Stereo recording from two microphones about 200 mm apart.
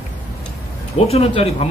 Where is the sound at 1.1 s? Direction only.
30° left (ahead or behind).